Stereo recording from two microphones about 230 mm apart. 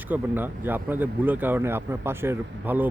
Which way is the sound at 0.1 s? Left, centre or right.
Centre.